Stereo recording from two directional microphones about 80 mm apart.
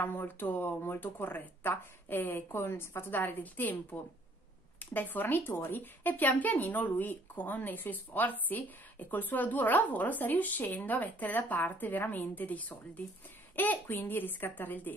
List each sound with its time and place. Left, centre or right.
0.0 s speech: left